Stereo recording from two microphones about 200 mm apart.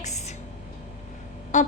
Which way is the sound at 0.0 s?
35° left (ahead or behind).